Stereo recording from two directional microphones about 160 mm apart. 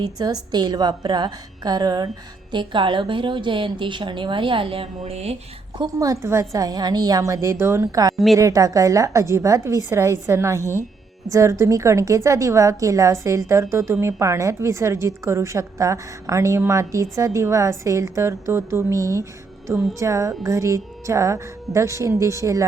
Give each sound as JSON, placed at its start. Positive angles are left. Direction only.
{"t": 0.0, "sound": "a woman's voice", "side_deg": -25}
{"t": 5.7, "sound": "a woman's voice", "side_deg": -25}
{"t": 10.6, "sound": "speech", "side_deg": 15}
{"t": 11.3, "sound": "a woman's voice", "side_deg": -20}